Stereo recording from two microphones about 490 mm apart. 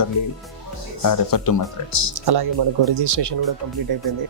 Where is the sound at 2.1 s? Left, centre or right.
Right.